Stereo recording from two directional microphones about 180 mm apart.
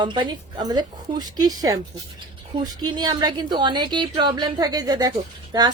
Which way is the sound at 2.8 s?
25° right (ahead or behind).